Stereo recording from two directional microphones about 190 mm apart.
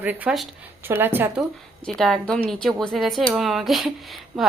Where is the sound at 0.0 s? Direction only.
10° right (ahead or behind).